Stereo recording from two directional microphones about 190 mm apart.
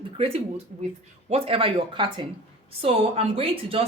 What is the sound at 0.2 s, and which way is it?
A woman's voice, 35° right (ahead or behind).